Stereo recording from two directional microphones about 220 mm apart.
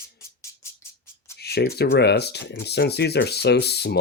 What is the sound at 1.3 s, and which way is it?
Speech, 45° left (ahead or behind).